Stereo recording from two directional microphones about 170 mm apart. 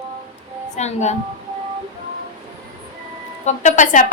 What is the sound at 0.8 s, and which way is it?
Speech, 40° left (ahead or behind).